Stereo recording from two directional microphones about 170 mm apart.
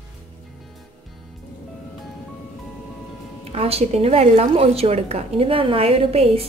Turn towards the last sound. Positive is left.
turn(degrees=-35)  # may be behind; listen again after turning